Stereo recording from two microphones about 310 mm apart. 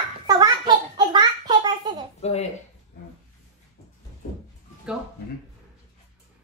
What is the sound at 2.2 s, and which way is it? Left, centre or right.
Speech, left.